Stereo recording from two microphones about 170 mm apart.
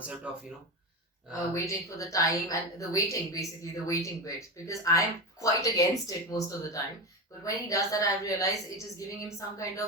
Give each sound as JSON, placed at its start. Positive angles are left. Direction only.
{"t": 1.5, "sound": "a woman's voice", "side_deg": 20}